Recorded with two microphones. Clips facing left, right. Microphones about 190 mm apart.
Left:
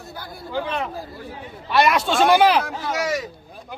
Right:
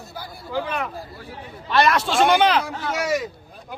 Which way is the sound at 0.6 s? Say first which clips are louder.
Left 1 dB; 25° left (ahead or behind).